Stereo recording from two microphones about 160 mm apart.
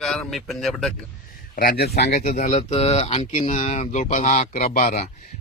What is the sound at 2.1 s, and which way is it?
Speech, 55° left (ahead or behind).